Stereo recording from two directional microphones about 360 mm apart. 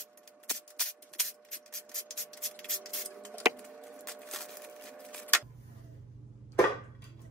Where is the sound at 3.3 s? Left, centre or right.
Centre.